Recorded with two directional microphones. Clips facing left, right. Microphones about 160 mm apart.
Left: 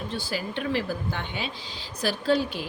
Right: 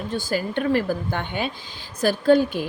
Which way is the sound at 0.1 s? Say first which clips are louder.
Right 9 dB; 45° right (ahead or behind).